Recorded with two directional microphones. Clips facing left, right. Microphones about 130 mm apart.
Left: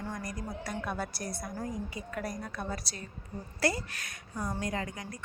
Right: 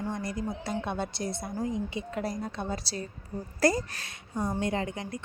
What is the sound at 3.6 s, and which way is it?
Speech, 45° right (ahead or behind).